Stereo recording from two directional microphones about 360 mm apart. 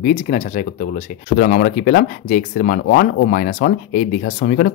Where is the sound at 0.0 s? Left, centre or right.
Left.